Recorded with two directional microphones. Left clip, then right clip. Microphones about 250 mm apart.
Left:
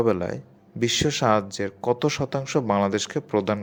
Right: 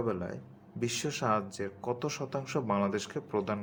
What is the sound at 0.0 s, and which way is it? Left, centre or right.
Speech, left.